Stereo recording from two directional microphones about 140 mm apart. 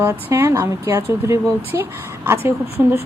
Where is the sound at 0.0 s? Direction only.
15° right (ahead or behind).